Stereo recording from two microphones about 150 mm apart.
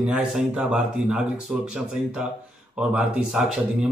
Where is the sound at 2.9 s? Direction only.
5° right (ahead or behind).